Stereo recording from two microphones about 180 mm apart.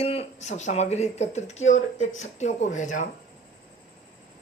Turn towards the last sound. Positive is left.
turn(degrees=45)  # may be behind; listen again after turning